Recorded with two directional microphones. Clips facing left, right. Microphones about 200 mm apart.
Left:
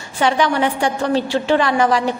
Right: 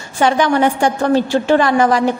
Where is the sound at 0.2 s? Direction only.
45° right (ahead or behind).